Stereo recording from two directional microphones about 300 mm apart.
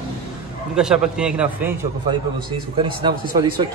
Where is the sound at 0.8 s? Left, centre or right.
Centre.